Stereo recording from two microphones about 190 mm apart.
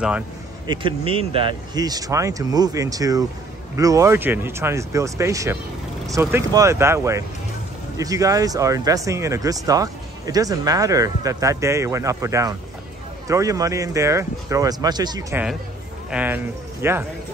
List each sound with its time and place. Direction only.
0.7 s speech: 30° right (ahead or behind)
16.1 s speech: 10° right (ahead or behind)